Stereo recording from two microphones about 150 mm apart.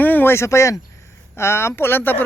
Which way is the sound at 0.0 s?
15° left (ahead or behind).